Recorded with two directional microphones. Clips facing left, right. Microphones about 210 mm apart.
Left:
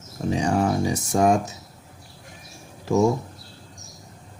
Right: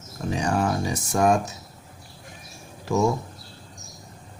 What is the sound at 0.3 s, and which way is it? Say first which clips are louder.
Speech: left 2 dB; 20° left (ahead or behind).